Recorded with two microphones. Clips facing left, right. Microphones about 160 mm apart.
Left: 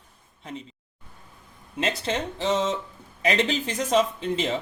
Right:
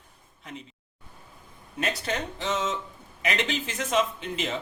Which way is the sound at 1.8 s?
25° left (ahead or behind).